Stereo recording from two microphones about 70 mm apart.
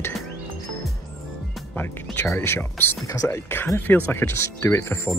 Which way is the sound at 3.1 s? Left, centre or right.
Left.